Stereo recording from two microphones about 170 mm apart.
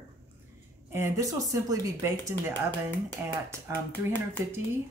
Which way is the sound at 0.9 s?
15° right (ahead or behind).